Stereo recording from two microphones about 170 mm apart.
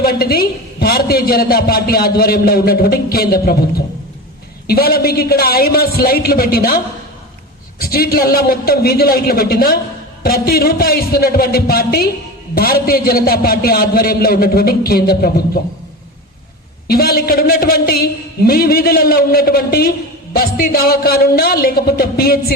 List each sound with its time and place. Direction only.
0.0 s a woman's voice: 65° left (ahead or behind)
16.8 s a woman's voice: 65° left (ahead or behind)